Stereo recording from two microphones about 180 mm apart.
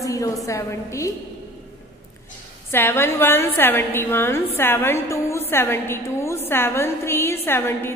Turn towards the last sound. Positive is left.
turn(degrees=15)  # may be behind; listen again after turning